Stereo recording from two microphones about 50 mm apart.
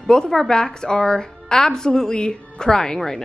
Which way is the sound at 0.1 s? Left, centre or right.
Centre.